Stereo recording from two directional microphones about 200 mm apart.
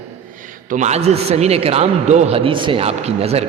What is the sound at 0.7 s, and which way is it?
A man's voice, 35° right (ahead or behind).